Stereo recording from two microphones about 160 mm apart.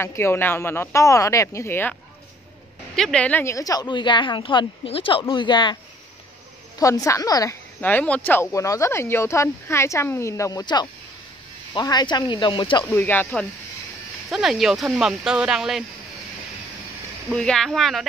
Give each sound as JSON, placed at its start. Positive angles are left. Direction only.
{"t": 0.0, "sound": "speech", "side_deg": 15}
{"t": 3.0, "sound": "speech", "side_deg": 5}
{"t": 6.8, "sound": "speech", "side_deg": 20}
{"t": 7.8, "sound": "speech", "side_deg": 10}
{"t": 12.9, "sound": "speech", "side_deg": 10}
{"t": 14.3, "sound": "speech", "side_deg": 0}
{"t": 17.3, "sound": "speech", "side_deg": 5}